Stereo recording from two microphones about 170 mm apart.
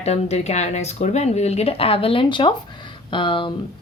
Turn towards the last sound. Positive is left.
turn(degrees=30)  # may be behind; listen again after turning